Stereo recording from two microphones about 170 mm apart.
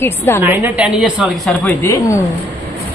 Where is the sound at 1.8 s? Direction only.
15° left (ahead or behind).